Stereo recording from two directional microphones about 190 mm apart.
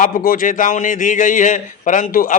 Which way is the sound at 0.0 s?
50° left (ahead or behind).